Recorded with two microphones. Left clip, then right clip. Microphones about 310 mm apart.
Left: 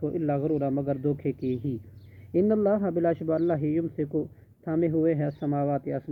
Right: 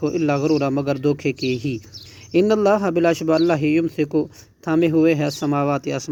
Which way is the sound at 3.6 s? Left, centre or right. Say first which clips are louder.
Right 9 dB; right.